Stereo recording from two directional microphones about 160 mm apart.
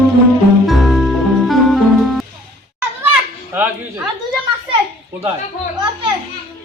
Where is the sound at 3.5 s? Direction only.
10° right (ahead or behind).